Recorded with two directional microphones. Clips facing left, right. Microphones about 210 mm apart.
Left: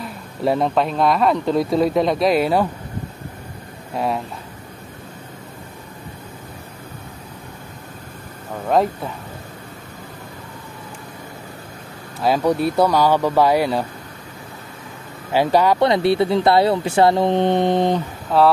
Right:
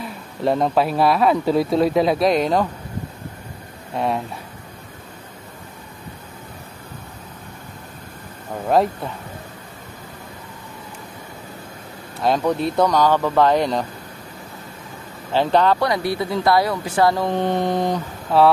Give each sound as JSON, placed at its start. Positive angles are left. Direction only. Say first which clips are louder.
{"t": 0.0, "sound": "speech", "louder": "even", "side_deg": 0}
{"t": 3.9, "sound": "speech", "louder": "even", "side_deg": 0}
{"t": 8.6, "sound": "speech", "louder": "even", "side_deg": 0}
{"t": 12.2, "sound": "speech", "louder": "left 2 dB", "side_deg": 5}
{"t": 15.3, "sound": "speech", "louder": "left 1 dB", "side_deg": 10}
{"t": 15.8, "sound": "speech", "louder": "left 5 dB", "side_deg": 25}
{"t": 18.3, "sound": "speech", "louder": "even", "side_deg": 0}